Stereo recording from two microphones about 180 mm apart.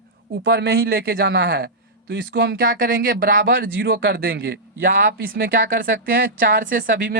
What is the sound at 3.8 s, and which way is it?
Speech, 70° right (ahead or behind).